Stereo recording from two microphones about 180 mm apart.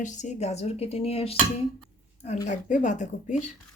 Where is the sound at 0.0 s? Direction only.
40° left (ahead or behind).